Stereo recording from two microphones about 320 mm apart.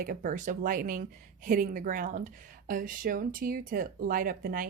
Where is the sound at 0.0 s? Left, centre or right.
Right.